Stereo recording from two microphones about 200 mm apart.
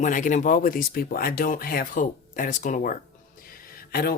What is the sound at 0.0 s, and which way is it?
Speech, 40° left (ahead or behind).